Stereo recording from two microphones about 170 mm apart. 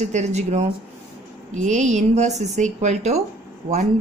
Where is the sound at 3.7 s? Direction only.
55° right (ahead or behind).